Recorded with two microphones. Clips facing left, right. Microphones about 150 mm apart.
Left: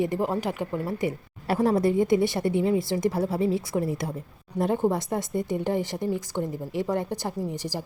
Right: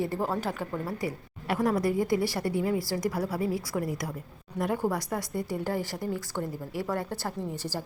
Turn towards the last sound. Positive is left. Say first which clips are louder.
# left 3 dB
turn(degrees=15)  # may be behind; listen again after turning